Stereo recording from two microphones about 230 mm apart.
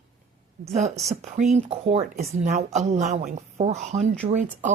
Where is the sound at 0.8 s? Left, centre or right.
Right.